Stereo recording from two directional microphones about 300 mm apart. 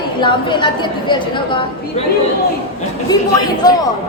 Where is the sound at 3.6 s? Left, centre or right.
Centre.